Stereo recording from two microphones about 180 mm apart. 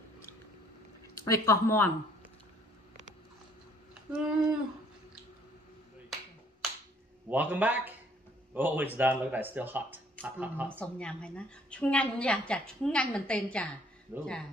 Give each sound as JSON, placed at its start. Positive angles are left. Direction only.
{"t": 1.1, "sound": "speech", "side_deg": 15}
{"t": 4.1, "sound": "speech", "side_deg": -5}
{"t": 7.2, "sound": "speech", "side_deg": -10}
{"t": 10.8, "sound": "a woman's voice", "side_deg": 5}
{"t": 14.1, "sound": "speech", "side_deg": -10}